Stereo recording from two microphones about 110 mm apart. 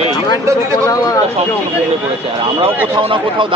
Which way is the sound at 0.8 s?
30° left (ahead or behind).